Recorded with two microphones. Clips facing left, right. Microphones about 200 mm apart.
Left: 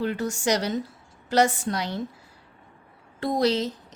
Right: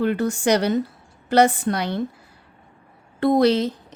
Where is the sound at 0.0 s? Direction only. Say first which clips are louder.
Right 6 dB; 60° right (ahead or behind).